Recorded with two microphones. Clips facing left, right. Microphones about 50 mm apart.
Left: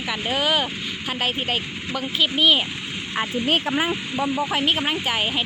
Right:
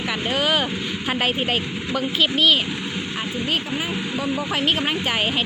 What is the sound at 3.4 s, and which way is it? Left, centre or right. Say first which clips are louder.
Speech: left 4 dB; left.